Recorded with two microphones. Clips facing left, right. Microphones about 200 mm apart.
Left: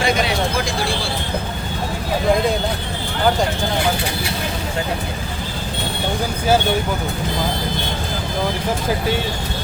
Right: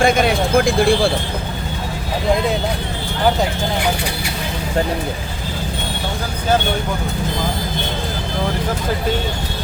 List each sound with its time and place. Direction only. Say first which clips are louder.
0.0 s speech: right 4 dB; 50° right (ahead or behind)